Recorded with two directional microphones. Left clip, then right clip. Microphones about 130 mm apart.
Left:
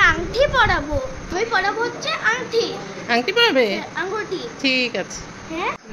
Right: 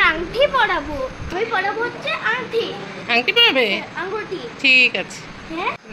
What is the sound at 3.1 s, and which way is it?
A woman's voice, 35° left (ahead or behind).